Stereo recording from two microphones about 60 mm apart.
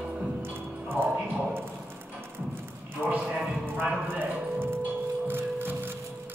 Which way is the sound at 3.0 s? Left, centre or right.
Centre.